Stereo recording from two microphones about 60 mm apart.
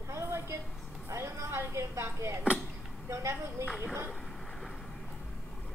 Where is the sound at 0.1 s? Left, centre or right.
Right.